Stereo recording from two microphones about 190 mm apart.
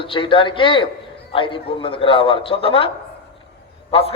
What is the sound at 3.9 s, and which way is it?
Speech, 30° left (ahead or behind).